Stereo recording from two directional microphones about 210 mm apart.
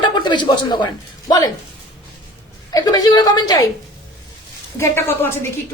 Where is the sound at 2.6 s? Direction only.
20° left (ahead or behind).